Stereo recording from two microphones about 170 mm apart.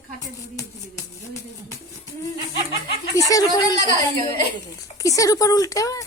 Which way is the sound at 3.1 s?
20° left (ahead or behind).